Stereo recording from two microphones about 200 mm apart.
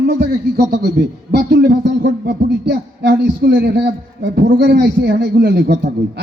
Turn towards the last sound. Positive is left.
turn(degrees=-55)  # may be behind; listen again after turning